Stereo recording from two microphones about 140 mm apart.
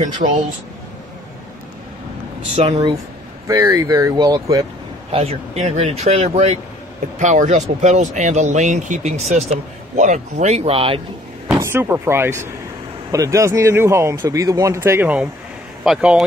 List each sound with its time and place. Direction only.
0.0 s speech: 60° right (ahead or behind)
2.6 s speech: 45° right (ahead or behind)
3.4 s speech: 25° right (ahead or behind)
5.1 s speech: 45° right (ahead or behind)
7.2 s speech: 60° right (ahead or behind); by 11.0 s 40° right (ahead or behind)
11.5 s speech: 20° right (ahead or behind)